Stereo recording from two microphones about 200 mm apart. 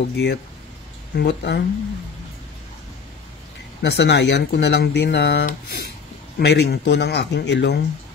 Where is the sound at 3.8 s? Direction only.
60° left (ahead or behind).